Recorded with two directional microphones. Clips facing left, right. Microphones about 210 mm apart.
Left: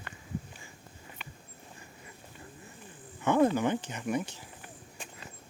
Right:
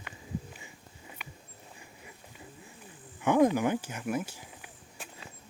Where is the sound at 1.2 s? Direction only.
10° right (ahead or behind).